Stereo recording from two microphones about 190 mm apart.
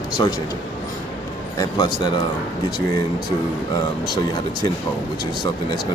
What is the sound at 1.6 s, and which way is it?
Speech, 20° left (ahead or behind).